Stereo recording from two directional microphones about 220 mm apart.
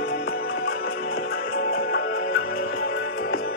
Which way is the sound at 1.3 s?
45° left (ahead or behind).